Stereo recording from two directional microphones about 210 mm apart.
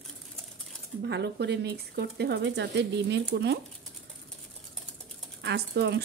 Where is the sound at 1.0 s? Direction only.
55° right (ahead or behind).